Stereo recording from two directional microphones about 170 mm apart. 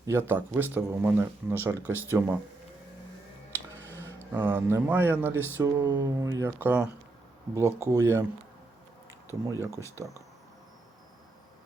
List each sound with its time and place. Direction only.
0.0 s speech: 15° right (ahead or behind)
3.8 s a sound: 15° left (ahead or behind)
4.4 s speech: 10° right (ahead or behind)
9.2 s speech: 15° right (ahead or behind)